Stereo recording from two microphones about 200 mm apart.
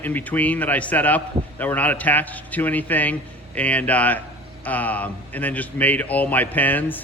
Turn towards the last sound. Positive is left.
turn(degrees=10)  # may be behind; listen again after turning